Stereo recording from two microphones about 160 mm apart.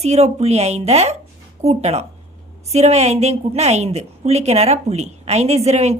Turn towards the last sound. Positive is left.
turn(degrees=-45)  # may be behind; listen again after turning